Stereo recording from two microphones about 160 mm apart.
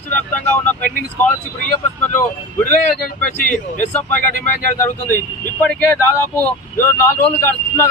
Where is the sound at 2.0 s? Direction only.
15° left (ahead or behind).